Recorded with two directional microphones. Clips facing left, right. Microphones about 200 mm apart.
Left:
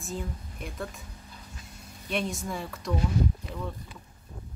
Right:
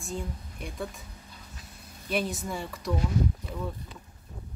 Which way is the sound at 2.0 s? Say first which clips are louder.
Right 1 dB; centre (ahead or behind).